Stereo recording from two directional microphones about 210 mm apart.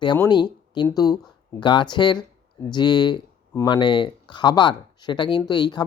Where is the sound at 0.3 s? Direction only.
20° left (ahead or behind).